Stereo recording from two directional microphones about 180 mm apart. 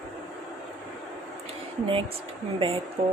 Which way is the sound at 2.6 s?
30° right (ahead or behind).